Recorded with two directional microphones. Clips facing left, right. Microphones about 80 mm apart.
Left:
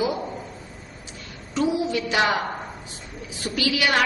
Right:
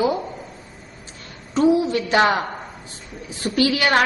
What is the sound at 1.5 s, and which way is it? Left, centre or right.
Speech, right.